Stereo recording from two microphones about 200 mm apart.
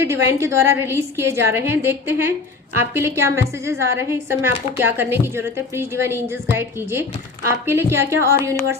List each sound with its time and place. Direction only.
0.0 s a woman's voice: 15° right (ahead or behind)